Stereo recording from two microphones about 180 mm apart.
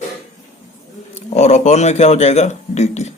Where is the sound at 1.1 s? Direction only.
40° left (ahead or behind).